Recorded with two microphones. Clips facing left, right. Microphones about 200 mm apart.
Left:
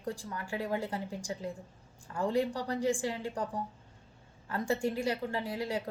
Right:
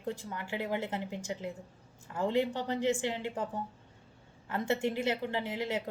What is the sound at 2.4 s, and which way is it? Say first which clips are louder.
A woman's voice: right 1 dB; 20° right (ahead or behind).